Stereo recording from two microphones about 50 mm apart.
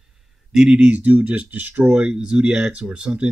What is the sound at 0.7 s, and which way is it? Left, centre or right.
Speech, right.